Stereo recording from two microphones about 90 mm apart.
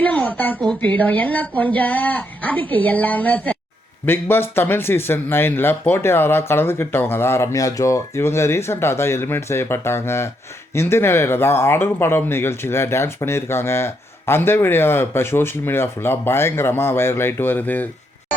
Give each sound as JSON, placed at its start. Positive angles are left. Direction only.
{"t": 0.0, "sound": "a woman's voice", "side_deg": 15}